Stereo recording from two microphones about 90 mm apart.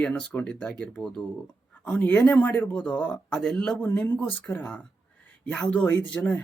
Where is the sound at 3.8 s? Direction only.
20° left (ahead or behind).